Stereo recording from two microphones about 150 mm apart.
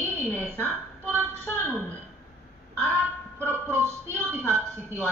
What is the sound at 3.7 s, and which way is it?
Speech, 15° right (ahead or behind).